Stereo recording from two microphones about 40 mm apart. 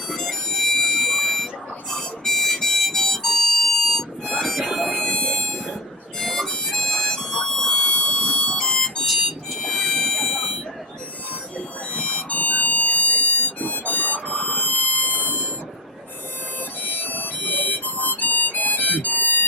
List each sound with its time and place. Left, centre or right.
0.1 s music: centre
1.0 s buzzer: centre
1.9 s harmonica: centre
4.9 s a sound: centre
6.1 s harmonica: centre
9.0 s harmonica: centre
9.6 s harmonica: centre
11.5 s harmonica: left
16.8 s harmonica: left